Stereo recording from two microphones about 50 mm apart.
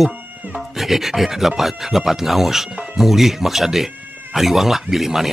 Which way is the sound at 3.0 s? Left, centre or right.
Centre.